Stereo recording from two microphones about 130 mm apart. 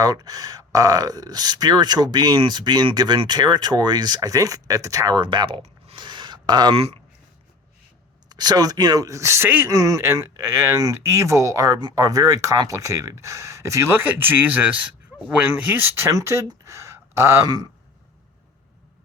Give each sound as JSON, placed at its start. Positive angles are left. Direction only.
{"t": 0.0, "sound": "speech", "side_deg": -30}
{"t": 6.0, "sound": "a sound", "side_deg": -35}
{"t": 8.3, "sound": "speech", "side_deg": -30}